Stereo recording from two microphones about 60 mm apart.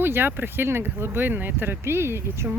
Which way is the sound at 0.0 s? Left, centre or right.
Right.